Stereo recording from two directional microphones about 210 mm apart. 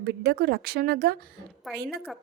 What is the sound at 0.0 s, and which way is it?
A woman's voice, 45° right (ahead or behind).